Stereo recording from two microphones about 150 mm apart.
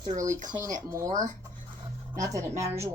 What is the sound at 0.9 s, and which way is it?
Speech, 20° right (ahead or behind).